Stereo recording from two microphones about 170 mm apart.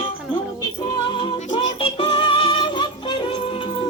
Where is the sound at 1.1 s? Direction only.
25° left (ahead or behind).